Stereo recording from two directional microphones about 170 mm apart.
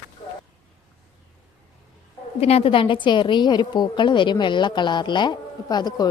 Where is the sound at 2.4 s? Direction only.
35° left (ahead or behind).